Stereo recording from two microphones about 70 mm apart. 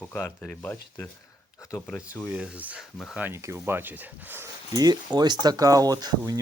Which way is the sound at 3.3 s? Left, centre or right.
Right.